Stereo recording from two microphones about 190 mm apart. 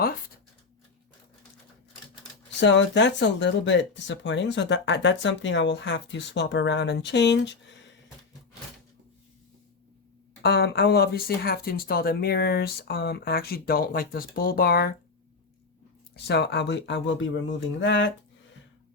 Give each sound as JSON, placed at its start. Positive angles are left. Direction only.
{"t": 2.6, "sound": "speech", "side_deg": 70}
{"t": 10.4, "sound": "speech", "side_deg": 60}
{"t": 16.1, "sound": "speech", "side_deg": 60}